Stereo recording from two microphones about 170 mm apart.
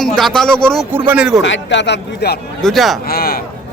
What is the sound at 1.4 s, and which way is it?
Speech, 90° left.